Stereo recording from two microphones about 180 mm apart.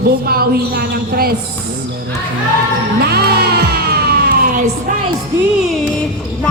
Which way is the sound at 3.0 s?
60° right (ahead or behind).